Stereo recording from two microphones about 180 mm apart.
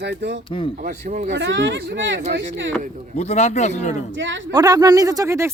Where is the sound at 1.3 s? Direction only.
85° right.